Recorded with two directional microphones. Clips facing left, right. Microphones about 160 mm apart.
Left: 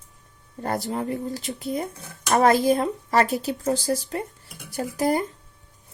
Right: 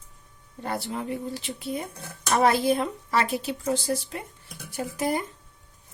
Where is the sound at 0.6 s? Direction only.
45° left (ahead or behind).